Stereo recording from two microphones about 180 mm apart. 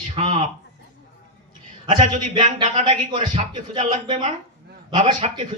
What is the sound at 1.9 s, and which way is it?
A man's voice, 30° right (ahead or behind).